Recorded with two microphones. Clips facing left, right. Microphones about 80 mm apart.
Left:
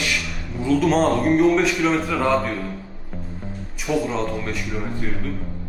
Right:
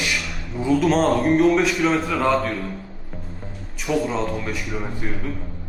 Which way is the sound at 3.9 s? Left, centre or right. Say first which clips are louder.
Even; centre.